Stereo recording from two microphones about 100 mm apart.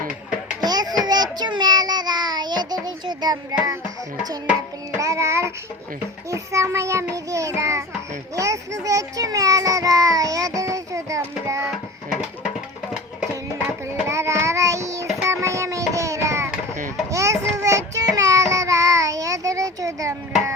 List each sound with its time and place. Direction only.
0.6 s a sound: 40° right (ahead or behind)
1.0 s child singing: 45° right (ahead or behind)
4.9 s a child's voice: 30° right (ahead or behind)
7.1 s child singing: 30° right (ahead or behind)
8.4 s a child's voice: 30° right (ahead or behind)
13.8 s child singing: 30° right (ahead or behind)